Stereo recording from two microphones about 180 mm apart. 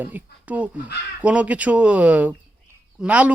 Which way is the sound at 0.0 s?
10° right (ahead or behind).